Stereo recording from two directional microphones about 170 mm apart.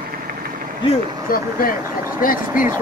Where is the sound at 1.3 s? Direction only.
60° left (ahead or behind).